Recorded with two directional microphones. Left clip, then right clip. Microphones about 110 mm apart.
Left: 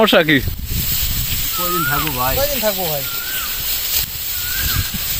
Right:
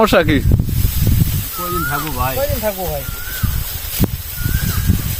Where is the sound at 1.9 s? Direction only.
5° right (ahead or behind).